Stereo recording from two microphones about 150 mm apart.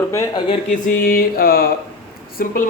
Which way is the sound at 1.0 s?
80° left.